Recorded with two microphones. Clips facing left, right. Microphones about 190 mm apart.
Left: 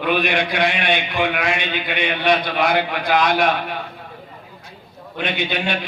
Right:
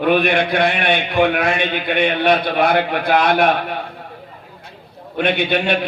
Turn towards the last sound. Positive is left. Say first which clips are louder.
# right 5 dB
turn(degrees=-60)  # may be behind; listen again after turning